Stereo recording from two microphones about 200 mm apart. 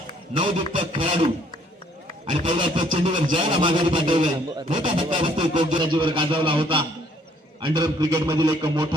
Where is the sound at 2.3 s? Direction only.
25° right (ahead or behind).